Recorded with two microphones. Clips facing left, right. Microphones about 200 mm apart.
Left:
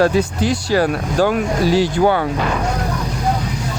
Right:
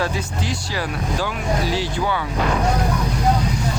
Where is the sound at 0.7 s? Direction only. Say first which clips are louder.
Left 9 dB; 50° left (ahead or behind).